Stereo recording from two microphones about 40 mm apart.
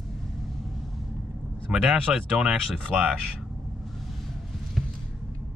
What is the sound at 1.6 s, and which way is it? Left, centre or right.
Speech, centre.